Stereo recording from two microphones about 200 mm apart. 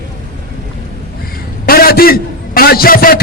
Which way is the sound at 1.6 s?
50° left (ahead or behind).